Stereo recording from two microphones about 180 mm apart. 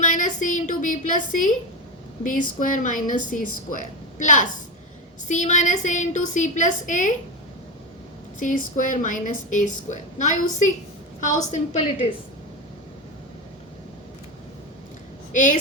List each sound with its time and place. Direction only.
0.0 s a woman's voice: 45° left (ahead or behind)
8.4 s a woman's voice: 45° left (ahead or behind)
15.3 s a woman's voice: 45° left (ahead or behind)